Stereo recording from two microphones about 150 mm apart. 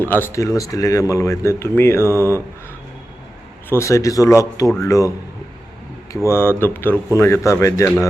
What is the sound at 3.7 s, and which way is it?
Speech, 20° left (ahead or behind).